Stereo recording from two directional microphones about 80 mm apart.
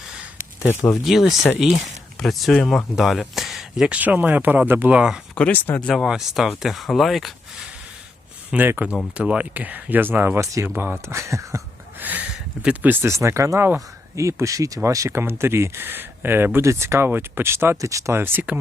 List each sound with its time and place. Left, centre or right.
1.0 s speech: centre
3.9 s speech: centre
4.9 s speech: centre
5.5 s speech: left
5.9 s speech: centre
8.4 s speech: right
11.9 s speech: right
13.1 s speech: right
15.1 s speech: right
16.6 s speech: right
17.7 s speech: right
18.2 s speech: right